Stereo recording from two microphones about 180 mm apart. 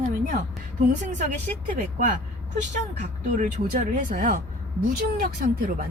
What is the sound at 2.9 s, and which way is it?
Speech, 45° right (ahead or behind).